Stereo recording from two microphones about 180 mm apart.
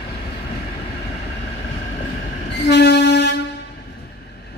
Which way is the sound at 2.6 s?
70° left (ahead or behind).